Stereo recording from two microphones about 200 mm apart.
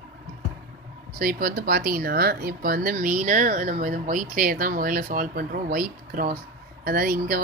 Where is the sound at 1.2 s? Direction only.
45° right (ahead or behind).